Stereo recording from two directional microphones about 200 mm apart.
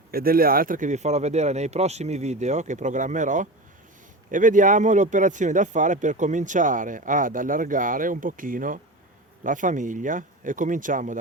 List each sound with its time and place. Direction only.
0.1 s speech: 45° right (ahead or behind)